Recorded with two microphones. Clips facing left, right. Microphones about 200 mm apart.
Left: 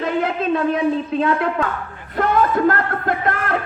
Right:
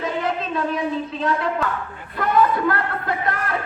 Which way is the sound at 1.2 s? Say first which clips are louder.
Left 3 dB; 60° left (ahead or behind).